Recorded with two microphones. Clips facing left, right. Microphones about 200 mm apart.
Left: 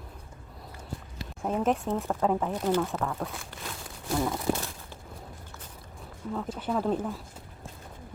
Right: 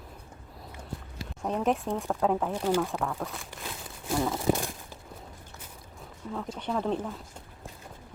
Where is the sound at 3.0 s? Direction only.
Centre (ahead or behind).